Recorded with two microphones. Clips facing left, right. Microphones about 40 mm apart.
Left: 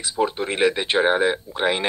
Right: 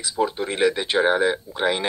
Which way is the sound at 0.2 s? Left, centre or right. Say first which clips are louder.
Left 1 dB; left.